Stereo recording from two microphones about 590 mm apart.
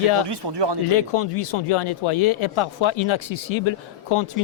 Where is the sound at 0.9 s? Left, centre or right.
Left.